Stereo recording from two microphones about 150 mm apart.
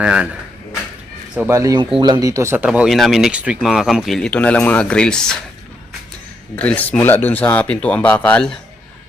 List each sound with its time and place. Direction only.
0.0 s speech: 5° right (ahead or behind)
1.5 s speech: 20° right (ahead or behind)
2.6 s speech: 5° right (ahead or behind)
6.6 s speech: 10° left (ahead or behind)